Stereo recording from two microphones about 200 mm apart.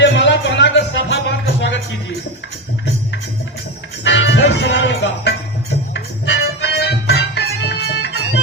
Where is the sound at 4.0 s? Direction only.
60° left (ahead or behind).